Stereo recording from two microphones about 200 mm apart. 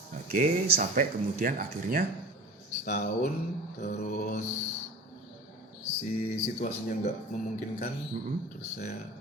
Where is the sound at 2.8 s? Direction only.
40° left (ahead or behind).